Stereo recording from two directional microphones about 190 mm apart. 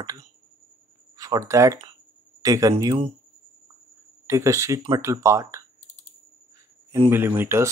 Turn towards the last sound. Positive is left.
turn(degrees=-15)  # may be behind; listen again after turning